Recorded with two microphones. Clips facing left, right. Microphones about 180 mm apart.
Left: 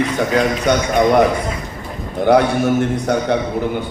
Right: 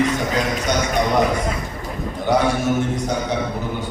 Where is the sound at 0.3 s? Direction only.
60° left (ahead or behind).